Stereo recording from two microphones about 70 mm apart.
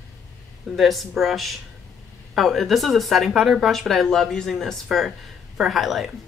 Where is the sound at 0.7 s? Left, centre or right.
Centre.